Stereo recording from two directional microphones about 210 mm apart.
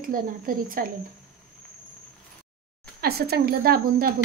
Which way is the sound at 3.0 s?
50° right (ahead or behind).